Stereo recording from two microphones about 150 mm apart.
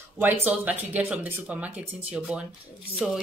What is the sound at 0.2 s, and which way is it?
Speech, 10° right (ahead or behind).